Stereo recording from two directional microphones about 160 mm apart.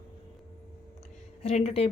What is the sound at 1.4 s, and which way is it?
Speech, 40° left (ahead or behind).